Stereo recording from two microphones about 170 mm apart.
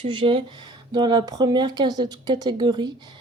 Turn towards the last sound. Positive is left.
turn(degrees=-25)  # may be behind; listen again after turning